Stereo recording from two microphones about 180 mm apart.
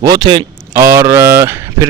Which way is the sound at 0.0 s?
20° right (ahead or behind).